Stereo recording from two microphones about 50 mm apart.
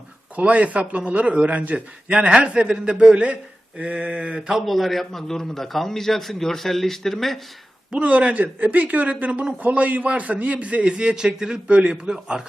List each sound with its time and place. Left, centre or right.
0.3 s a man's voice: right
4.6 s a man's voice: centre
7.9 s a man's voice: right